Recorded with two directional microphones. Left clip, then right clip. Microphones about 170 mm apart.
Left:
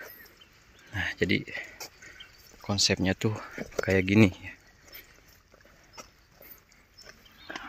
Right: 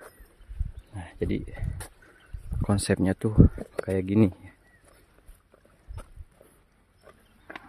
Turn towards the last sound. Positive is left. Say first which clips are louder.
# left 3 dB
turn(degrees=0)  # may be behind; listen again after turning